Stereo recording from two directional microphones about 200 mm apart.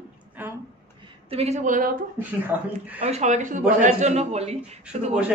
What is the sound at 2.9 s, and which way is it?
A man's voice, 35° right (ahead or behind).